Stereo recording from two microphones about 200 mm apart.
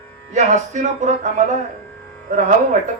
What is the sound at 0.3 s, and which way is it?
Music, 35° right (ahead or behind).